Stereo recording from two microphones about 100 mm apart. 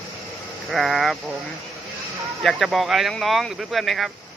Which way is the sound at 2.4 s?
Centre (ahead or behind).